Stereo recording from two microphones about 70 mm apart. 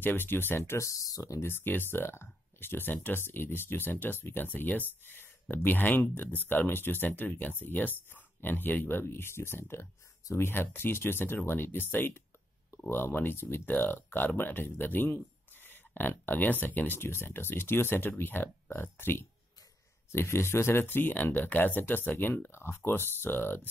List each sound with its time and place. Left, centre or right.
0.0 s speech: left
1.4 s speech: left